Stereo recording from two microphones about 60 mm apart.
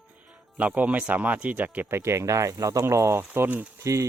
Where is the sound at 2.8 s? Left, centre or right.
Right.